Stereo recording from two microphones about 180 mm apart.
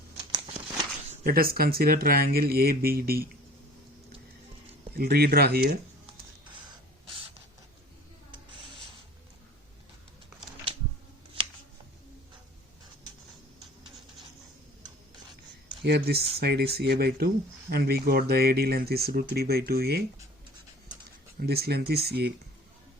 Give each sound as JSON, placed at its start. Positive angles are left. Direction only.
{"t": 1.2, "sound": "speech", "side_deg": -55}
{"t": 4.9, "sound": "speech", "side_deg": -60}
{"t": 6.4, "sound": "printer", "side_deg": -25}
{"t": 8.3, "sound": "a sound", "side_deg": -30}
{"t": 15.8, "sound": "speech", "side_deg": -70}